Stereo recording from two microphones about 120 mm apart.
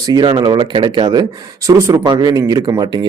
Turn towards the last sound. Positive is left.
turn(degrees=-30)  # may be behind; listen again after turning